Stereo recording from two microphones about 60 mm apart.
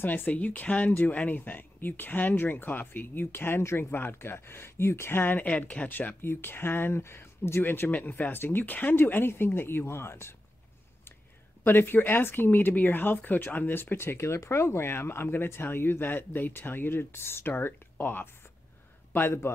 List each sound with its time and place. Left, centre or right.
0.0 s speech: left
6.2 s speech: left
7.9 s speech: left
11.6 s speech: left